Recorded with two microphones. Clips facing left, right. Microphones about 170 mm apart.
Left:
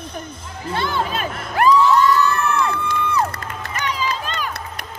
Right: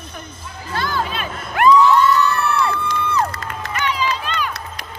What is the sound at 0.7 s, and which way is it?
Speech, 25° left (ahead or behind).